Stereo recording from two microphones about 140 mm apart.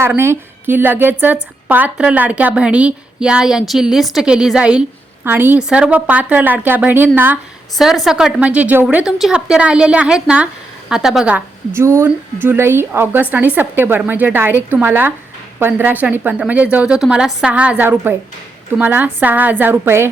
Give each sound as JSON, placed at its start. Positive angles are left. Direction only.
{"t": 0.2, "sound": "a woman's voice", "side_deg": -15}
{"t": 7.8, "sound": "a woman's voice", "side_deg": 0}